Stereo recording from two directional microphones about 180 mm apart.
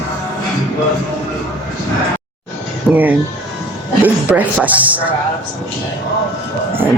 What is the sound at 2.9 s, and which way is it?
Speech, 10° right (ahead or behind).